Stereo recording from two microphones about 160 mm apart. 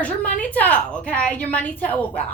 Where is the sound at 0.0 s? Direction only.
10° left (ahead or behind).